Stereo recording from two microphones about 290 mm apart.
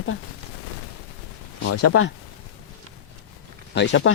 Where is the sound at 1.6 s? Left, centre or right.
Left.